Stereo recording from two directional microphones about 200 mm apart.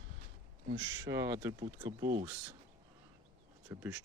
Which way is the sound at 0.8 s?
15° right (ahead or behind).